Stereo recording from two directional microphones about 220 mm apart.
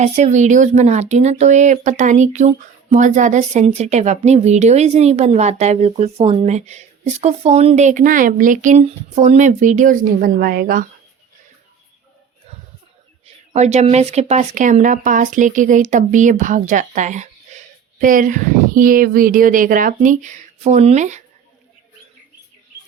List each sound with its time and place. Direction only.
0.0 s speech: 30° right (ahead or behind)
13.2 s speech: 30° right (ahead or behind)